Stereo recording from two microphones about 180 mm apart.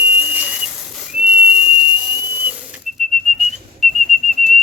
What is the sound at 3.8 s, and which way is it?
Whistle, centre (ahead or behind).